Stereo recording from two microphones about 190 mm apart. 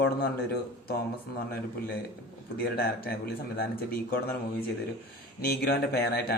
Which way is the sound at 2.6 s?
55° left (ahead or behind).